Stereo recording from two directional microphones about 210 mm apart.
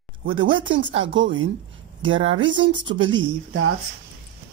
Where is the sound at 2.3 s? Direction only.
65° right (ahead or behind).